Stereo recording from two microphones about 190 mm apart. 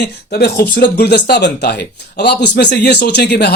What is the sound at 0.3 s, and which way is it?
Speech, 60° left (ahead or behind).